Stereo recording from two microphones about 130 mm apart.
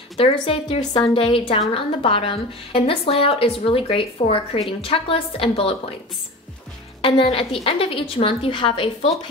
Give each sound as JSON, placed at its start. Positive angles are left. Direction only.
{"t": 0.2, "sound": "a woman's voice", "side_deg": 50}
{"t": 7.0, "sound": "a woman's voice", "side_deg": 45}